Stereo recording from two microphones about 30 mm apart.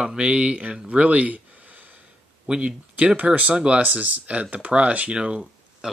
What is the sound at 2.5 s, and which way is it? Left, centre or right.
Speech, right.